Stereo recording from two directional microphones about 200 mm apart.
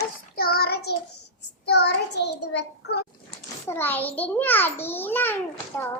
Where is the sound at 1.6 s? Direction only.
55° left (ahead or behind).